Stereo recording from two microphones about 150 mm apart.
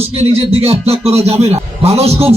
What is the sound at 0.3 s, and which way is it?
Speech, 40° right (ahead or behind).